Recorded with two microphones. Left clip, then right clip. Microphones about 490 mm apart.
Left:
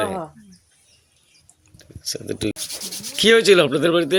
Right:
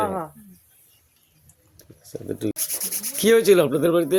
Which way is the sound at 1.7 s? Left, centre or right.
Right.